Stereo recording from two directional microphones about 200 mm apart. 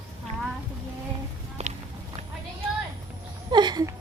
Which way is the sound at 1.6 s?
35° right (ahead or behind).